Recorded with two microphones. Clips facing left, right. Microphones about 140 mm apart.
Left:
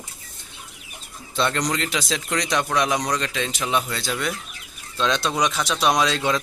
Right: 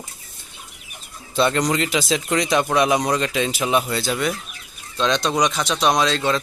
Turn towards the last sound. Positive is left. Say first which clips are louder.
# right 2 dB
turn(degrees=10)  # may be behind; listen again after turning